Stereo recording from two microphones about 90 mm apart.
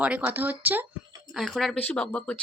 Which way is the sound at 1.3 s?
Centre (ahead or behind).